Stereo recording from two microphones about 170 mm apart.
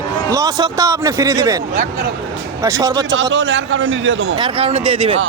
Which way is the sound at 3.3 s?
90° right.